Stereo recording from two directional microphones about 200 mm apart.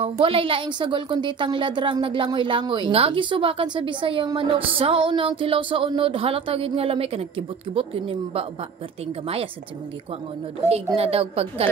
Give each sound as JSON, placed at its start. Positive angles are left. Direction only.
{"t": 0.0, "sound": "a woman's voice", "side_deg": -25}
{"t": 10.9, "sound": "a woman's voice", "side_deg": -30}